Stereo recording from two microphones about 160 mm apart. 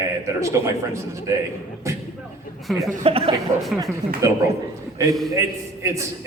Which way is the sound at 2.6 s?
Centre (ahead or behind).